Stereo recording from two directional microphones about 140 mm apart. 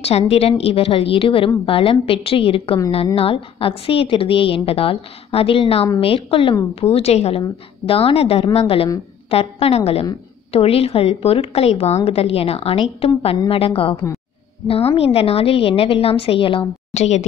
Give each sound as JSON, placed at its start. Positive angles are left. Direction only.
{"t": 0.3, "sound": "a woman's voice", "side_deg": 45}
{"t": 16.9, "sound": "speech", "side_deg": 50}